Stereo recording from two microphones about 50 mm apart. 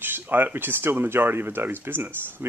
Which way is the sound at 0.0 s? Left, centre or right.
Right.